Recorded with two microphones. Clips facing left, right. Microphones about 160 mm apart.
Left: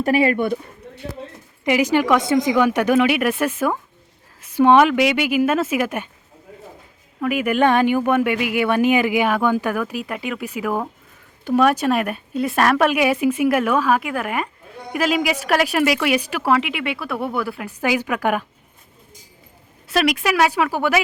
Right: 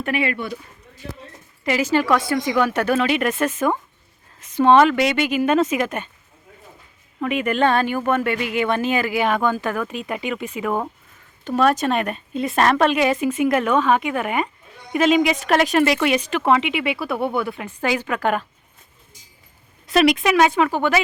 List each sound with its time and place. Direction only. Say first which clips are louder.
0.0 s speech: left 6 dB; 40° left (ahead or behind)
0.3 s speech: left 8 dB; 55° left (ahead or behind)
1.6 s speech: left 2 dB; 15° left (ahead or behind)
7.2 s speech: left 2 dB; 5° left (ahead or behind)
19.9 s speech: right 3 dB; centre (ahead or behind)